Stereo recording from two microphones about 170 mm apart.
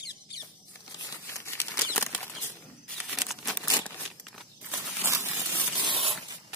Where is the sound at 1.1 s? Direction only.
15° left (ahead or behind).